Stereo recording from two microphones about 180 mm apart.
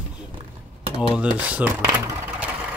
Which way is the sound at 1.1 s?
5° right (ahead or behind).